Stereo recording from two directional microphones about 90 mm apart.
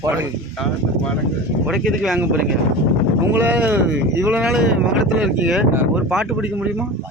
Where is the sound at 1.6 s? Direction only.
5° right (ahead or behind).